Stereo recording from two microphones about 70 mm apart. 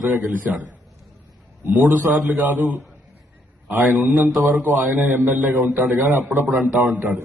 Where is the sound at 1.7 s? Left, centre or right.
Right.